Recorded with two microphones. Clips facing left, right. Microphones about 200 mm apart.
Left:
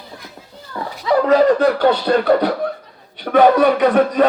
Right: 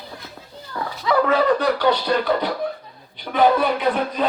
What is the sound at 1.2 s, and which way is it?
Speech, 45° left (ahead or behind).